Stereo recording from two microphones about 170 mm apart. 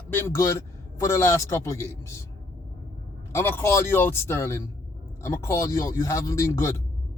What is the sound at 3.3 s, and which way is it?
Speech, 15° left (ahead or behind).